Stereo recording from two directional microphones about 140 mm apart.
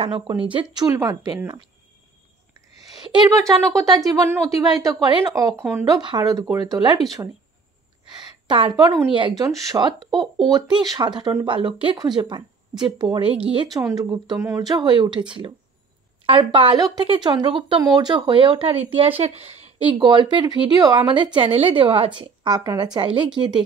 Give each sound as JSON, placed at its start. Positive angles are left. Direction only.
{"t": 0.4, "sound": "speech", "side_deg": -40}
{"t": 0.9, "sound": "speech", "side_deg": -25}
{"t": 2.9, "sound": "speech", "side_deg": -30}
{"t": 5.9, "sound": "speech", "side_deg": -30}
{"t": 8.2, "sound": "a woman's voice", "side_deg": -35}
{"t": 13.7, "sound": "speech", "side_deg": -25}
{"t": 19.9, "sound": "speech", "side_deg": -35}